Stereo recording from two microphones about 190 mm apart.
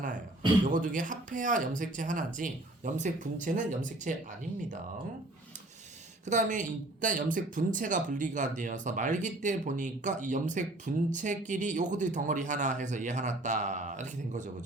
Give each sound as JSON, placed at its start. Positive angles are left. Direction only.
{"t": 0.6, "sound": "speech", "side_deg": -45}
{"t": 6.2, "sound": "speech", "side_deg": -40}